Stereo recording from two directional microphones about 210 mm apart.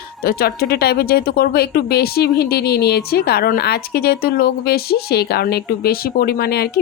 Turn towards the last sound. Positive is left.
turn(degrees=50)  # may be behind; listen again after turning